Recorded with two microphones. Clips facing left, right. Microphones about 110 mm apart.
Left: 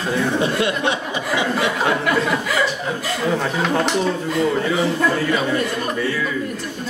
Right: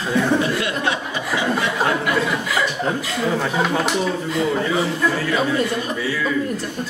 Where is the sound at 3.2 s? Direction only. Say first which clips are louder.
Even; centre (ahead or behind).